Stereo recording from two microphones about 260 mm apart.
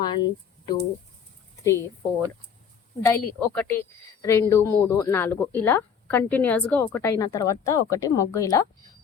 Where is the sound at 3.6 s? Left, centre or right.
Centre.